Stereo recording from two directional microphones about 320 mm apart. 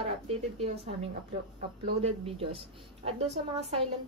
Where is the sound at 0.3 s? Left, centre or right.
Centre.